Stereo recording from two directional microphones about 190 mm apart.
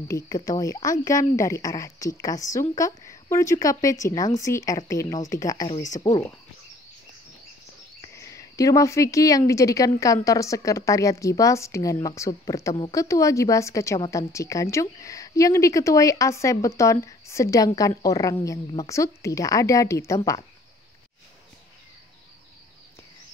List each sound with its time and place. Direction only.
0.6 s speech: 20° left (ahead or behind)
8.0 s speech: 15° left (ahead or behind)